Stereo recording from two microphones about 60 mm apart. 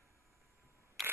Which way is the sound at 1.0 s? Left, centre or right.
Centre.